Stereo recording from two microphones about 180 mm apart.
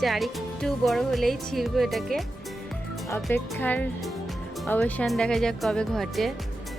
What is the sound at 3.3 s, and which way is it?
Speech, 10° left (ahead or behind).